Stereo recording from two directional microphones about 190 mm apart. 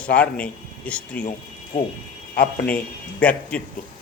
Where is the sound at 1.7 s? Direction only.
40° left (ahead or behind).